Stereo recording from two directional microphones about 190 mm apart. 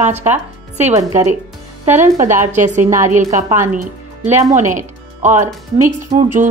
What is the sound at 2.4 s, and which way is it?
A woman's voice, 40° right (ahead or behind).